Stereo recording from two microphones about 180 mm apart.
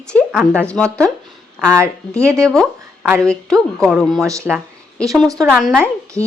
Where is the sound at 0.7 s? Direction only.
5° left (ahead or behind).